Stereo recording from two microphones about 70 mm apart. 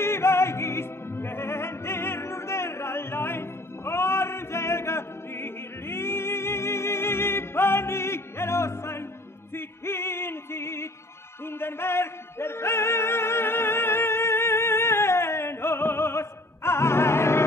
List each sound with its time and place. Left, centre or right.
0.0 s opera: left
9.5 s music: left